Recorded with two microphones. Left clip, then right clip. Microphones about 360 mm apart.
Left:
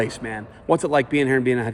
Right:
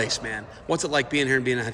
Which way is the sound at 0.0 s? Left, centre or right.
Centre.